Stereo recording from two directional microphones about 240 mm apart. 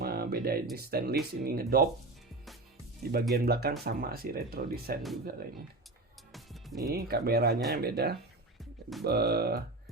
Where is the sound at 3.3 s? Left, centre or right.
Right.